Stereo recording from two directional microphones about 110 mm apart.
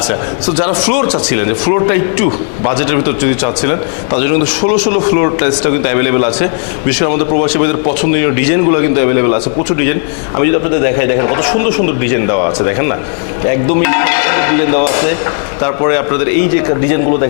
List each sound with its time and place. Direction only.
0.9 s a man's voice: 15° left (ahead or behind)